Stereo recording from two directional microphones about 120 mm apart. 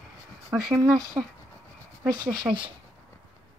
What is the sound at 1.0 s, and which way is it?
Speech, 35° right (ahead or behind).